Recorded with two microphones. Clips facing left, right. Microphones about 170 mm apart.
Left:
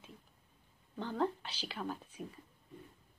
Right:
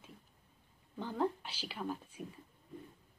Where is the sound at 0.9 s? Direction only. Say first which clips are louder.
Even; 10° right (ahead or behind).